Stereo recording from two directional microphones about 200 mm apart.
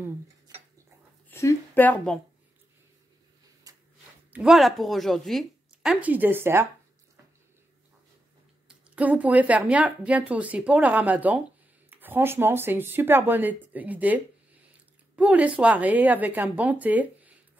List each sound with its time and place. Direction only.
1.3 s speech: 10° left (ahead or behind)
3.7 s a sound: 15° right (ahead or behind)
4.3 s speech: centre (ahead or behind)
8.6 s speech: 5° right (ahead or behind)